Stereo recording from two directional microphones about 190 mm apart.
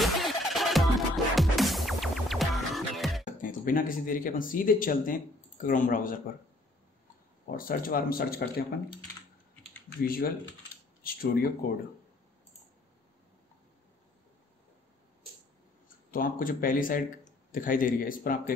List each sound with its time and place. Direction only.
0.0 s music: centre (ahead or behind)
3.4 s speech: 45° left (ahead or behind)
7.5 s speech: 50° left (ahead or behind)
9.8 s speech: 50° left (ahead or behind)
16.1 s speech: 50° left (ahead or behind)